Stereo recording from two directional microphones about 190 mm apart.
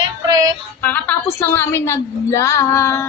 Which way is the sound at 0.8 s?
10° left (ahead or behind).